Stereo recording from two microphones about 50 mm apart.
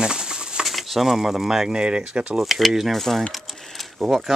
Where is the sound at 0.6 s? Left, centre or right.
Centre.